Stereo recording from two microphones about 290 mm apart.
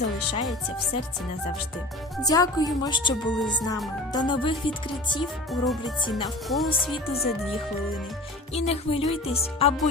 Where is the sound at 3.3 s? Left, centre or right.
Centre.